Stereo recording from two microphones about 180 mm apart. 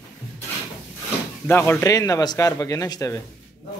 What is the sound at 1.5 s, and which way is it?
A man's voice, 10° left (ahead or behind).